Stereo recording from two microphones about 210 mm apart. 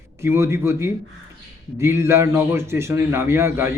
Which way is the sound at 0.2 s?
10° right (ahead or behind).